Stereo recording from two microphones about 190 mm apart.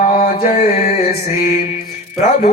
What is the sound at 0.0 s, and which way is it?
Music, 50° left (ahead or behind).